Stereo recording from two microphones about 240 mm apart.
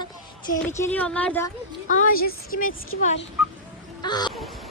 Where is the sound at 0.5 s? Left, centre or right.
Centre.